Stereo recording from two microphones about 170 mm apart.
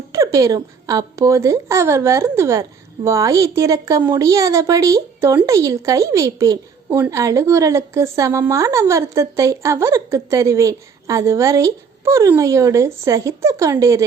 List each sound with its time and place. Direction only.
0.1 s speech: 20° right (ahead or behind)